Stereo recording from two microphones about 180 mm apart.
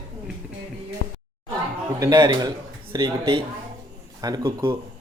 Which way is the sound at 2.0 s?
20° right (ahead or behind).